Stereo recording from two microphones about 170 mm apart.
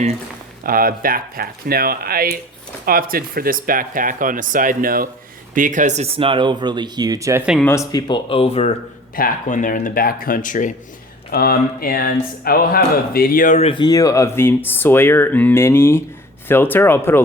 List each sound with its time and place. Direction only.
0.6 s speech: 55° right (ahead or behind); by 7.4 s 20° right (ahead or behind)
7.6 s speech: 15° left (ahead or behind); by 8.7 s 35° left (ahead or behind)
9.1 s speech: 55° left (ahead or behind)
11.3 s speech: 65° left (ahead or behind)
13.7 s speech: 25° left (ahead or behind)